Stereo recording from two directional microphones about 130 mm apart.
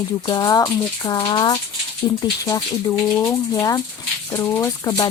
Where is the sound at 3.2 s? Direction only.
25° left (ahead or behind).